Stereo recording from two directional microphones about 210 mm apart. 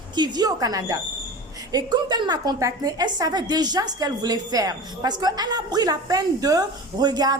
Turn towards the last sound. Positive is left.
turn(degrees=-20)  # may be behind; listen again after turning